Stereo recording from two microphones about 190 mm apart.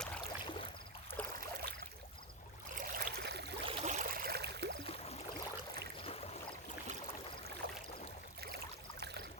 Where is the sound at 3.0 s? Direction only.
60° right (ahead or behind).